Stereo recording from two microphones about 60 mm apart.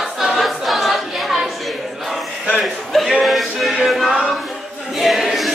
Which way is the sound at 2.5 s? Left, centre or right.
Centre.